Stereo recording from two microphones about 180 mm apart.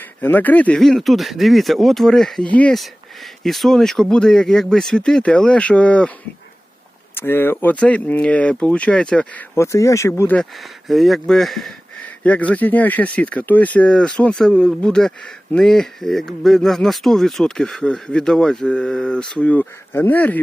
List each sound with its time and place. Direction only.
0.0 s speech: 10° left (ahead or behind)
7.2 s speech: 10° left (ahead or behind)
10.6 s speech: centre (ahead or behind)